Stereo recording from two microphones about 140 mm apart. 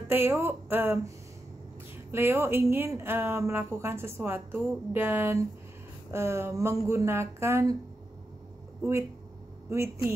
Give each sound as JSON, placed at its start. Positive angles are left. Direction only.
{"t": 0.1, "sound": "speech", "side_deg": -15}
{"t": 2.0, "sound": "speech", "side_deg": -15}